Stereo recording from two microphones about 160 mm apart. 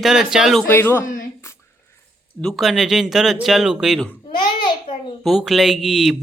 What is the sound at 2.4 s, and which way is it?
Speech, centre (ahead or behind).